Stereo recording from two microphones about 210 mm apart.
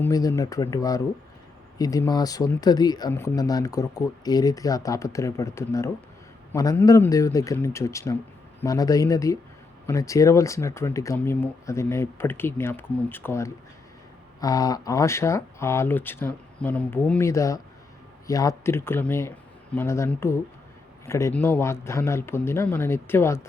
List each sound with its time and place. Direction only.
0.0 s speech: 15° left (ahead or behind)